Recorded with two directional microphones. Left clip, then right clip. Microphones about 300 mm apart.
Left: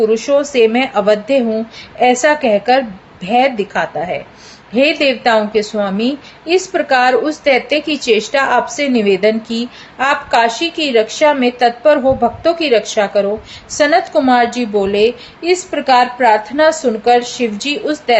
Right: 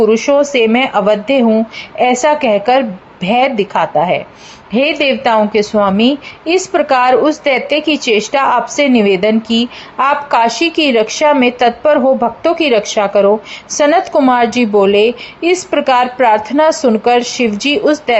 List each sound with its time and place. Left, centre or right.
0.1 s a woman's voice: centre